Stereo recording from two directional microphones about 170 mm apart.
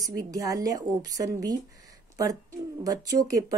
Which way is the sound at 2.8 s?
20° right (ahead or behind).